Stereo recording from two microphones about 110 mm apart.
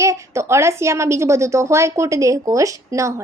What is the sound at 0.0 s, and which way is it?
A woman's voice, 25° right (ahead or behind).